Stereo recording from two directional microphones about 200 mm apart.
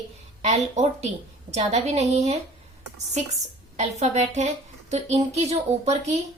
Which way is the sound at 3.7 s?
35° right (ahead or behind).